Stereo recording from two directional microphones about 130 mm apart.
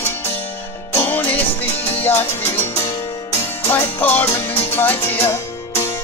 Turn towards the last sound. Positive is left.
turn(degrees=20)  # may be behind; listen again after turning